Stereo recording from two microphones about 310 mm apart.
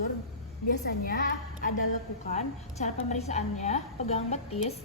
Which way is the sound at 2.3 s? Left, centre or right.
Left.